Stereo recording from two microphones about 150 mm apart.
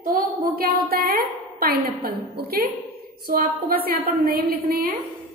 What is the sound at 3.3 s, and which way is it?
A woman's voice, 75° right (ahead or behind).